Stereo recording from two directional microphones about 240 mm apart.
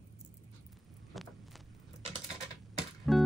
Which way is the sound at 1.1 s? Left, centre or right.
Centre.